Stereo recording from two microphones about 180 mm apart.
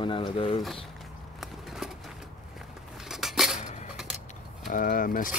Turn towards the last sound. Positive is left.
turn(degrees=50)  # may be behind; listen again after turning